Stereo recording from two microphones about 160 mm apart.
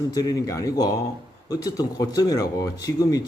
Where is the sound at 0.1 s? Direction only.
25° left (ahead or behind).